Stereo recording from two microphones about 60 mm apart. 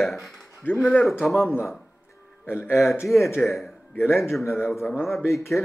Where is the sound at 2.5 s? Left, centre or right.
Left.